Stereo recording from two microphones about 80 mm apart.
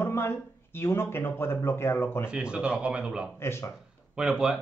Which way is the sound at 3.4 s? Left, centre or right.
Left.